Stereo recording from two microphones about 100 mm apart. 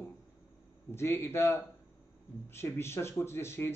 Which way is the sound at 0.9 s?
25° left (ahead or behind).